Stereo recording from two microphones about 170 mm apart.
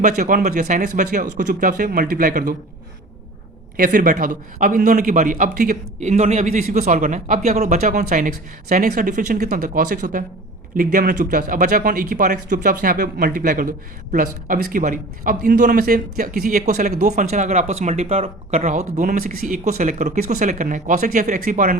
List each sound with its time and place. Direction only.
0.0 s speech: 50° right (ahead or behind)
3.8 s speech: 55° right (ahead or behind)